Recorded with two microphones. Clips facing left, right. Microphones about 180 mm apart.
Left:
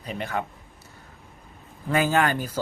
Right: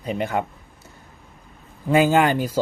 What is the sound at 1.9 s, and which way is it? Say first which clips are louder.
Speech: right 5 dB; 15° right (ahead or behind).